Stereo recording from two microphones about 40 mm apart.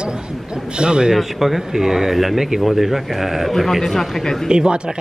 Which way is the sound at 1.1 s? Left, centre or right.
Centre.